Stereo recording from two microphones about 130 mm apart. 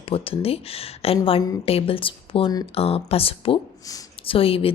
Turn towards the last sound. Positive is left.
turn(degrees=45)  # may be behind; listen again after turning